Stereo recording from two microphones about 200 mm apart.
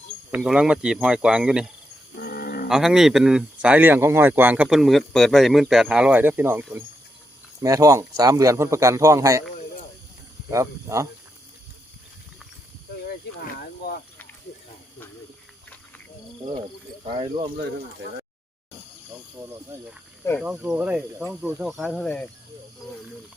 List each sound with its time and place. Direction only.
0.3 s speech: 5° right (ahead or behind)
2.1 s livestock: 50° left (ahead or behind)
2.6 s speech: 5° right (ahead or behind)
10.5 s speech: 15° right (ahead or behind)
13.1 s a sound: 50° left (ahead or behind)
17.2 s speech: 30° right (ahead or behind)
19.4 s speech: 10° right (ahead or behind)
21.6 s speech: centre (ahead or behind)